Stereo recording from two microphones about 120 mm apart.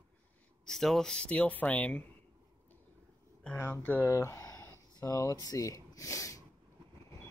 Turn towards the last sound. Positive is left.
turn(degrees=30)  # may be behind; listen again after turning